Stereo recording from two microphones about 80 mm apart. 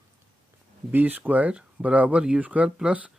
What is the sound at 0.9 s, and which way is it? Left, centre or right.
Speech, right.